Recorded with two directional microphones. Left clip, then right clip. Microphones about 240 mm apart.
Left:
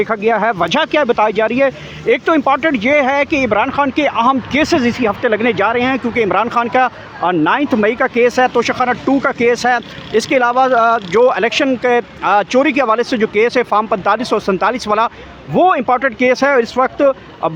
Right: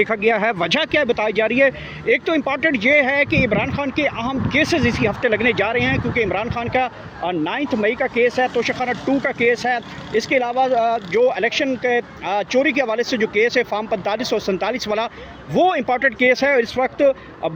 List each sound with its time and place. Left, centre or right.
0.0 s speech: centre